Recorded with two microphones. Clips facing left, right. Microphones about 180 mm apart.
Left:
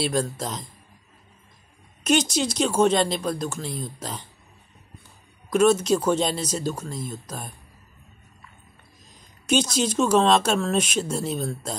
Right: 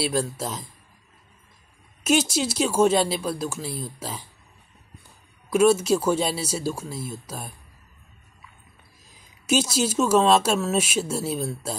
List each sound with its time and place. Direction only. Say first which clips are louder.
0.0 s speech: even; 5° right (ahead or behind)
2.0 s speech: even; 5° right (ahead or behind)
5.5 s speech: even; 10° right (ahead or behind)
9.1 s speech: even; 5° right (ahead or behind)